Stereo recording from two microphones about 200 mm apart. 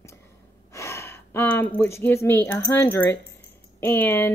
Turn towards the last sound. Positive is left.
turn(degrees=10)  # may be behind; listen again after turning